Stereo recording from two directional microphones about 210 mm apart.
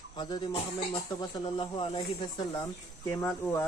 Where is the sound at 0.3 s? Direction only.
25° left (ahead or behind).